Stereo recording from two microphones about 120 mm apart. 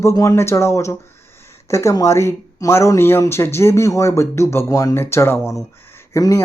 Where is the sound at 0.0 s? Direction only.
25° left (ahead or behind).